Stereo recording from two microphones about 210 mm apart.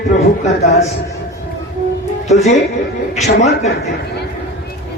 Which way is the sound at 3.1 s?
30° left (ahead or behind).